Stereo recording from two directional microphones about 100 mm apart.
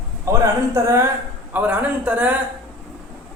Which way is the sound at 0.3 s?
30° right (ahead or behind).